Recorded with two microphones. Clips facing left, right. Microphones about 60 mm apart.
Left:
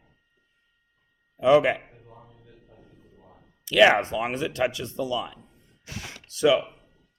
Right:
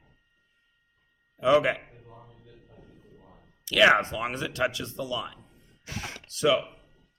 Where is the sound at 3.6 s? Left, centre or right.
Left.